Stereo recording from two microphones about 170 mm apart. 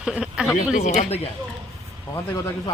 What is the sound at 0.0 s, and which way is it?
Speech, 5° right (ahead or behind).